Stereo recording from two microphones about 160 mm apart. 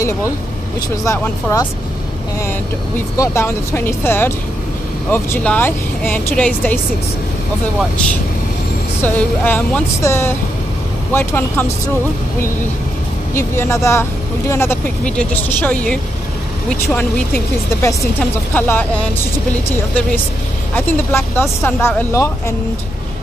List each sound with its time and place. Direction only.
0.7 s speech: 20° left (ahead or behind)
3.2 s speech: 15° left (ahead or behind)
9.0 s speech: 10° left (ahead or behind)
13.3 s speech: 15° left (ahead or behind)
18.5 s speech: 10° left (ahead or behind)
20.7 s speech: 15° left (ahead or behind)